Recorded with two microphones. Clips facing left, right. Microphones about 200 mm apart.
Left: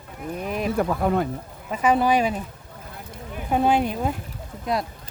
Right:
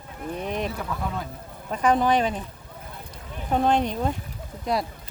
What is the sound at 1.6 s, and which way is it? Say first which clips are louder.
Speech: left 1 dB; 5° left (ahead or behind).